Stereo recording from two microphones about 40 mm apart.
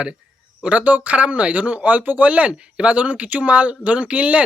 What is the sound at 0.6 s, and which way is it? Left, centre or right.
A man's voice, right.